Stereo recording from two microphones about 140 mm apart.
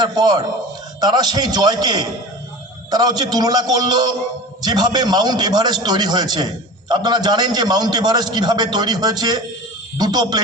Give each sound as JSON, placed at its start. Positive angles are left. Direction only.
{"t": 0.0, "sound": "a man's voice", "side_deg": -30}